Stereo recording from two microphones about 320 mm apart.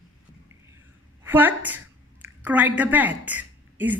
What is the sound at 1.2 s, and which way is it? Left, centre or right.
A woman's voice, centre.